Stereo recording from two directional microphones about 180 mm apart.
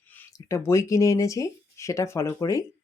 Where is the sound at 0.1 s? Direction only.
15° left (ahead or behind).